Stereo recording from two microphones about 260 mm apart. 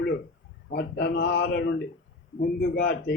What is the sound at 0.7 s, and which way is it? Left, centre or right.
Speech, left.